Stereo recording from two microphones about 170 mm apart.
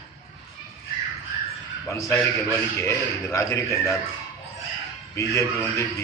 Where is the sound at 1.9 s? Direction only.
15° left (ahead or behind).